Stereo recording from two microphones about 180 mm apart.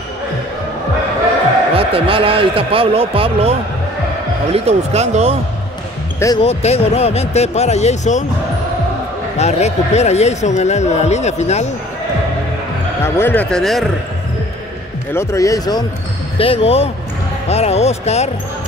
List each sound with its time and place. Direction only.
1.8 s a man's voice: 30° right (ahead or behind)
4.6 s a man's voice: 35° right (ahead or behind)
6.1 s speech: 20° left (ahead or behind)
6.4 s speech: 35° left (ahead or behind)
9.4 s speech: 35° left (ahead or behind)
13.0 s speech: 10° left (ahead or behind)
15.1 s speech: 20° left (ahead or behind)
16.3 s speech: 30° left (ahead or behind)